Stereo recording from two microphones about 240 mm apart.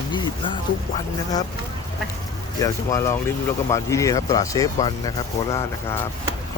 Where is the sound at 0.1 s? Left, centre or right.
Centre.